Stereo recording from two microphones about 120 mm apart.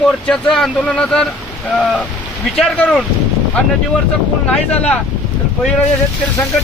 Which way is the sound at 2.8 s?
10° left (ahead or behind).